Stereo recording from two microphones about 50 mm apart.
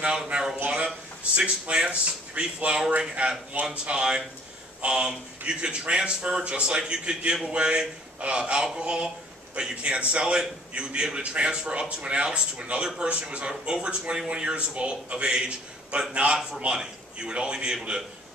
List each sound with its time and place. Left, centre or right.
0.0 s speech: centre
1.2 s a man's voice: right